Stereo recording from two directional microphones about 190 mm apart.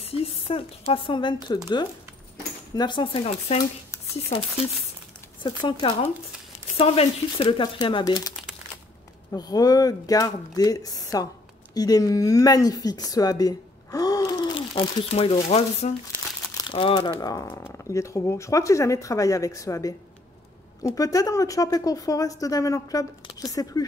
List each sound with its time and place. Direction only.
0.0 s speech: 30° left (ahead or behind)
2.7 s speech: 25° left (ahead or behind)
5.4 s speech: 25° left (ahead or behind)
9.3 s speech: 20° left (ahead or behind)
14.7 s speech: 35° left (ahead or behind)